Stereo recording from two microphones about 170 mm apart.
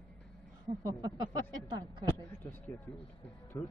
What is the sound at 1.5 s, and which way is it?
Speech, 25° right (ahead or behind).